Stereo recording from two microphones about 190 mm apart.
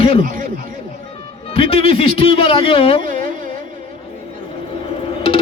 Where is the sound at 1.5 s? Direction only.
30° left (ahead or behind).